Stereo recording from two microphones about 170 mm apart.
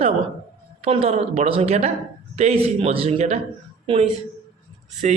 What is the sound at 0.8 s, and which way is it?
A woman's voice, 35° right (ahead or behind).